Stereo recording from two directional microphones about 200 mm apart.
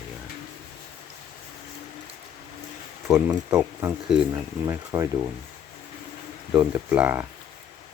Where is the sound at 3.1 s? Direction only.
10° right (ahead or behind).